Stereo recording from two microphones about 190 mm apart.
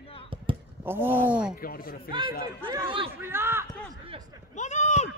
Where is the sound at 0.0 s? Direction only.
30° left (ahead or behind).